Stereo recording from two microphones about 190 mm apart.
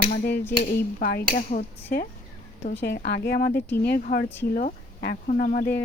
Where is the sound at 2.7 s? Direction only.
60° left (ahead or behind).